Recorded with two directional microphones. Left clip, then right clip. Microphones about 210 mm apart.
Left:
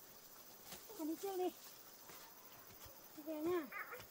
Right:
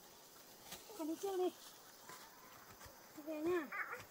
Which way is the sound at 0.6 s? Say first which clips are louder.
Right 1 dB; 5° left (ahead or behind).